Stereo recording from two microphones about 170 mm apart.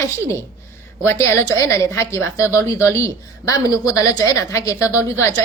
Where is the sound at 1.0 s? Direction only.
15° left (ahead or behind).